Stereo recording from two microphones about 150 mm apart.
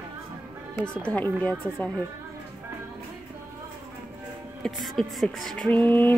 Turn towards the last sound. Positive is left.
turn(degrees=10)  # may be behind; listen again after turning